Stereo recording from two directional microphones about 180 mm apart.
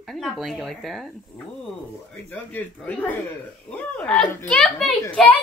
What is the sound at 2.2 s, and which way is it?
A child's voice, 10° left (ahead or behind).